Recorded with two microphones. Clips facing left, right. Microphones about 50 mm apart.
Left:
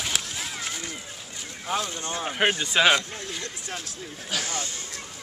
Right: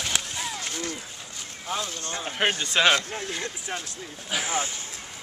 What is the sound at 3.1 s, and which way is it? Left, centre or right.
Speech, centre.